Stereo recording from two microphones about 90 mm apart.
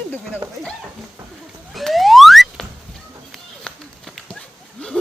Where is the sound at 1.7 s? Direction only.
Centre (ahead or behind).